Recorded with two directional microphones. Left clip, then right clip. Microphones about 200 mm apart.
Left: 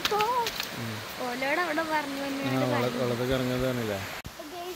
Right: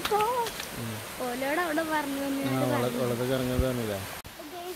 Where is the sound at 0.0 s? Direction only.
10° right (ahead or behind).